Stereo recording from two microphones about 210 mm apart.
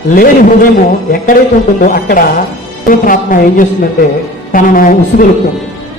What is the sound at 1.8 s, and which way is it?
Speech, 40° left (ahead or behind).